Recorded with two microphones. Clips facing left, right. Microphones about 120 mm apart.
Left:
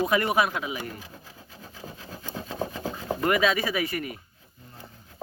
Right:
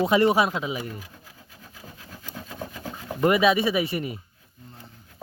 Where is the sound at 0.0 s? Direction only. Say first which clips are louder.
Right 4 dB; 25° right (ahead or behind).